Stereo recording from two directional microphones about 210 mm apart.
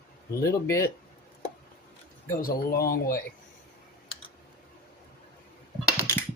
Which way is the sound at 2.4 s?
45° left (ahead or behind).